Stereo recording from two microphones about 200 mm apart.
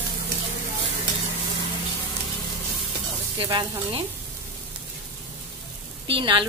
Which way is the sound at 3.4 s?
20° right (ahead or behind).